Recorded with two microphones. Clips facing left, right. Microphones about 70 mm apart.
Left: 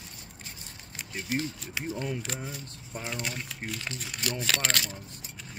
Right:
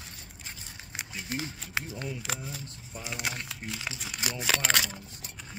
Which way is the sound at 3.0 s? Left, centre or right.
Centre.